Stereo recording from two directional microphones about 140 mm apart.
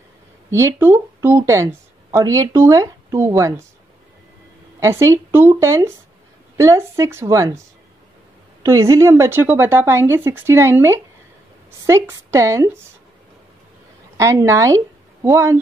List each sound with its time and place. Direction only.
0.5 s speech: 20° right (ahead or behind)
4.7 s speech: 20° right (ahead or behind)
8.6 s speech: 20° right (ahead or behind)
14.1 s speech: 20° right (ahead or behind)